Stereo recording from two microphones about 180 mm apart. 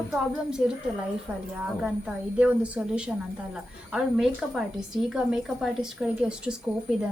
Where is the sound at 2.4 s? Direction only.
5° right (ahead or behind).